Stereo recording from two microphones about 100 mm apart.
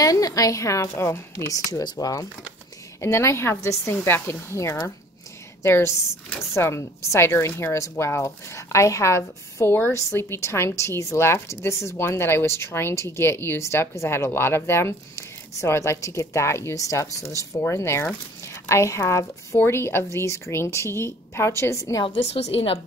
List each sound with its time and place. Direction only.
0.0 s a woman's voice: 35° left (ahead or behind)
22.0 s a woman's voice: 75° left (ahead or behind)